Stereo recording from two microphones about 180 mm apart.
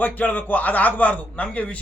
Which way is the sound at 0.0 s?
10° left (ahead or behind).